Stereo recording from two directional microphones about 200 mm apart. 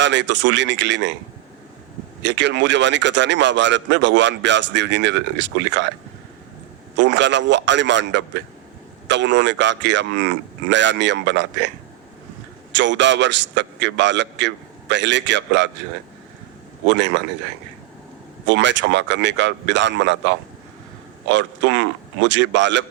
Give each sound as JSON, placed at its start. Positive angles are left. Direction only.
{"t": 0.0, "sound": "speech", "side_deg": -65}
{"t": 2.2, "sound": "speech", "side_deg": -60}
{"t": 6.9, "sound": "speech", "side_deg": -65}
{"t": 12.7, "sound": "speech", "side_deg": -65}
{"t": 16.8, "sound": "speech", "side_deg": -65}
{"t": 18.4, "sound": "speech", "side_deg": -65}